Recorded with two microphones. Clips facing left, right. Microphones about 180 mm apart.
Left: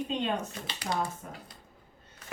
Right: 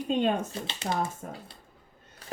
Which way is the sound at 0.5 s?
25° right (ahead or behind).